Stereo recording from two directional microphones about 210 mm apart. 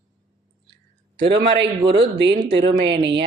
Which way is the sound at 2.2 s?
50° right (ahead or behind).